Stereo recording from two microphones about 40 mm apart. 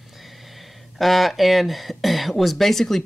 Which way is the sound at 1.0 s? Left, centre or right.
Centre.